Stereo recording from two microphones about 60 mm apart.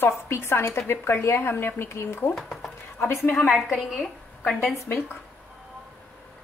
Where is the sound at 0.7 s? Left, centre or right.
Left.